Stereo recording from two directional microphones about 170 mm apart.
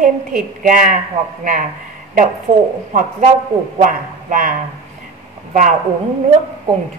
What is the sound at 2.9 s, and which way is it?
A woman's voice, 45° right (ahead or behind).